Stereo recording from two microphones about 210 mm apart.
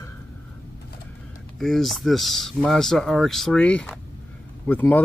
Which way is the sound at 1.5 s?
Centre (ahead or behind).